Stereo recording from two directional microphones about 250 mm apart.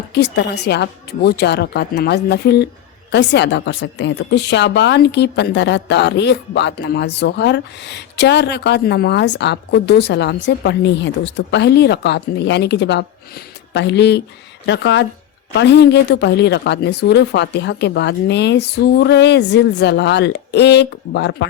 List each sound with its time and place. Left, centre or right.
0.1 s a woman's voice: left